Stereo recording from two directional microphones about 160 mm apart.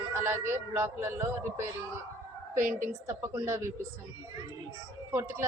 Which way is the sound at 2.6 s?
55° right (ahead or behind).